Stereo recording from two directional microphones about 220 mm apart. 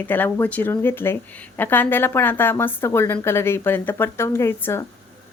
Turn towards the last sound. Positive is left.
turn(degrees=10)  # may be behind; listen again after turning